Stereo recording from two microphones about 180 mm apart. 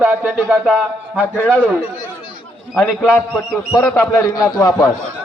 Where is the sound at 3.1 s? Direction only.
10° left (ahead or behind).